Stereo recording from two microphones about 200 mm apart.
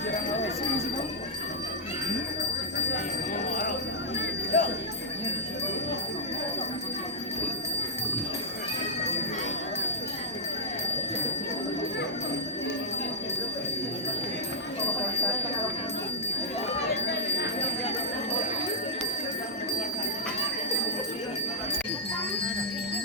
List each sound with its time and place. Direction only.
4.5 s jingle bell: 45° left (ahead or behind)